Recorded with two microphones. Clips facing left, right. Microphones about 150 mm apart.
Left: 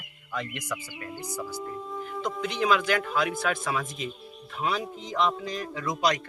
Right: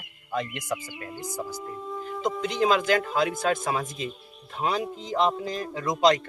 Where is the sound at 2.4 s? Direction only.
40° right (ahead or behind).